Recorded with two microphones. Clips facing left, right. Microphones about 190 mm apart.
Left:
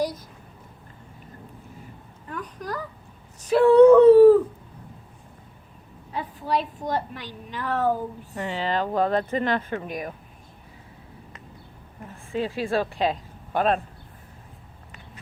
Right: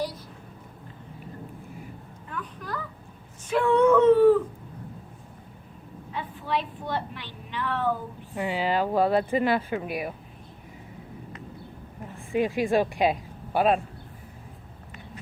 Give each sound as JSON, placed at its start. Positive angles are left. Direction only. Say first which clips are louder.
{"t": 2.3, "sound": "a sound", "louder": "left 3 dB", "side_deg": 40}
{"t": 6.1, "sound": "a woman's voice", "louder": "left 3 dB", "side_deg": 40}
{"t": 8.4, "sound": "speech", "louder": "right 1 dB", "side_deg": -10}
{"t": 12.3, "sound": "speech", "louder": "right 2 dB", "side_deg": -15}